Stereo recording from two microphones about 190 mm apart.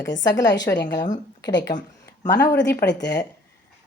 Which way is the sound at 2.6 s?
65° left (ahead or behind).